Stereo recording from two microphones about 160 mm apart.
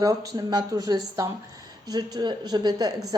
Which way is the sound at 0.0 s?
20° right (ahead or behind).